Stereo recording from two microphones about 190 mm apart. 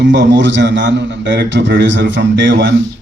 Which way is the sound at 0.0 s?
70° right (ahead or behind).